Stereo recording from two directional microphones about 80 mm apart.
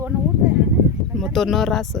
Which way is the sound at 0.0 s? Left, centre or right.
Right.